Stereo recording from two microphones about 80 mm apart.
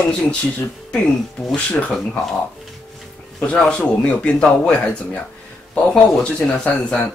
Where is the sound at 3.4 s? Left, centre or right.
Centre.